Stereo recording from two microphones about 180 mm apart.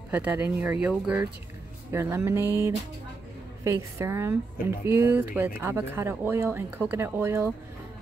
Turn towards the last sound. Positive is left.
turn(degrees=-15)  # may be behind; listen again after turning